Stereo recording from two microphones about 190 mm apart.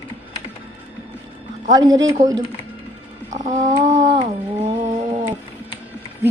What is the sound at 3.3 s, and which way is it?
Music, 40° right (ahead or behind).